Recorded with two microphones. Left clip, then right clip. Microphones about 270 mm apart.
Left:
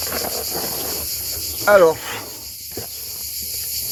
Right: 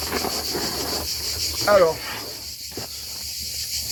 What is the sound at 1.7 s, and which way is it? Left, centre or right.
Speech, left.